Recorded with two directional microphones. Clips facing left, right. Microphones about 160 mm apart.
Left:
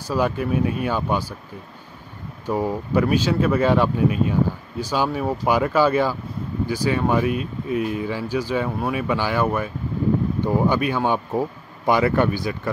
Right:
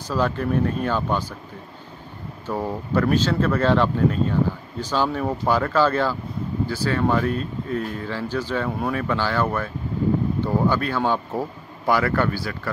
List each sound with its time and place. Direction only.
0.1 s speech: 10° left (ahead or behind)
2.4 s speech: 10° left (ahead or behind)